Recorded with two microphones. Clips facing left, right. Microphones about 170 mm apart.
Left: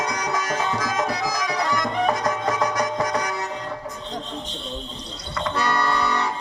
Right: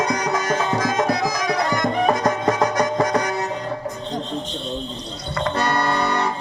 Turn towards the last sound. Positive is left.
turn(degrees=-50)  # may be behind; listen again after turning